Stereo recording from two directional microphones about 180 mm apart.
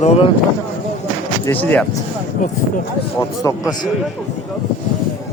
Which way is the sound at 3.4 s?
20° left (ahead or behind).